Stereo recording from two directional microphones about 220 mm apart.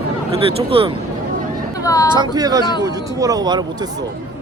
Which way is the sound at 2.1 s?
20° right (ahead or behind).